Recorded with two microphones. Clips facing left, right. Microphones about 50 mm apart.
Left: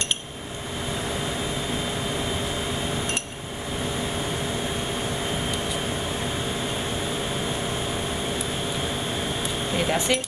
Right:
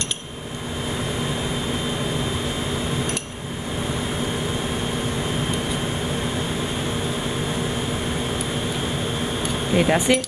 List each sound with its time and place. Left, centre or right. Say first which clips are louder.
9.8 s speech: right 6 dB; right